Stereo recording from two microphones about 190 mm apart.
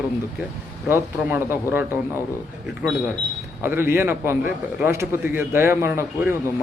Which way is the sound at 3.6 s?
10° right (ahead or behind).